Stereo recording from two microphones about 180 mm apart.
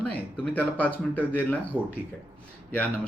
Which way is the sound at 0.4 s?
10° left (ahead or behind).